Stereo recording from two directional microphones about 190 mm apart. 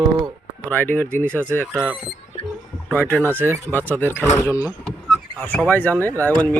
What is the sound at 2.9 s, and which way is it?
Speech, 10° left (ahead or behind).